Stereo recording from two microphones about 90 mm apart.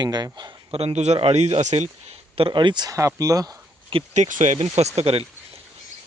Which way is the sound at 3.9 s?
90° right.